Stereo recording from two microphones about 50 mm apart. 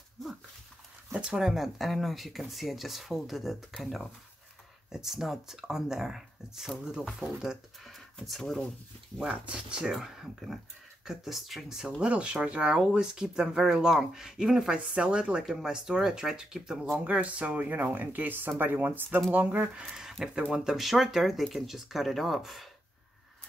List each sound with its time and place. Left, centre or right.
1.1 s speech: centre
7.8 s speech: centre
9.3 s speech: right
9.8 s speech: centre
12.0 s speech: right
17.0 s speech: right
19.9 s speech: centre